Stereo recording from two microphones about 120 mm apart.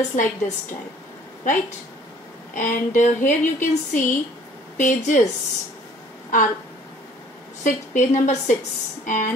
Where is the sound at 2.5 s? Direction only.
90° left.